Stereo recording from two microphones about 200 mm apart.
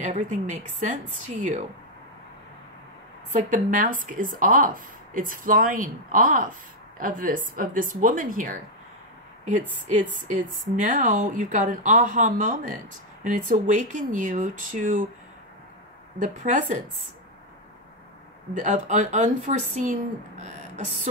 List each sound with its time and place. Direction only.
0.0 s speech: 40° right (ahead or behind)
3.3 s a woman's voice: 40° right (ahead or behind)
10.1 s speech: 40° right (ahead or behind)
16.2 s speech: 40° right (ahead or behind)
18.5 s speech: 35° right (ahead or behind)